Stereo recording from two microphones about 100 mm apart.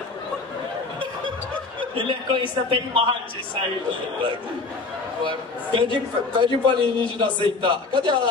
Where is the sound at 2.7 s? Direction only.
65° right (ahead or behind).